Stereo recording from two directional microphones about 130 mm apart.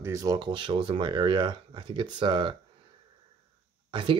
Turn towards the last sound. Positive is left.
turn(degrees=-40)  # may be behind; listen again after turning